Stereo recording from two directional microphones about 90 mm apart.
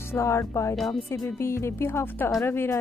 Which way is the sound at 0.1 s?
35° left (ahead or behind).